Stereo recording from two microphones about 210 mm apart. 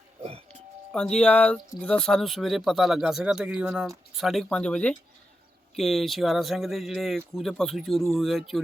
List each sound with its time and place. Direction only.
0.2 s music: 30° right (ahead or behind)
0.9 s speech: 5° left (ahead or behind)